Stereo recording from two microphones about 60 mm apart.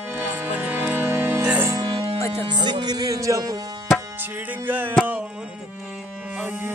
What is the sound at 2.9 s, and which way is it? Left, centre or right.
Music, right.